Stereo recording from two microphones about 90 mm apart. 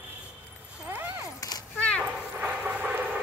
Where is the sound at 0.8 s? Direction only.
20° right (ahead or behind).